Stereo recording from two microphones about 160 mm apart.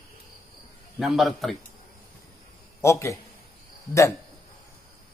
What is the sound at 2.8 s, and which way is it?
Speech, 15° left (ahead or behind).